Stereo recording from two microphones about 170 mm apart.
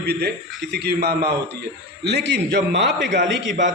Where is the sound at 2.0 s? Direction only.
90° right.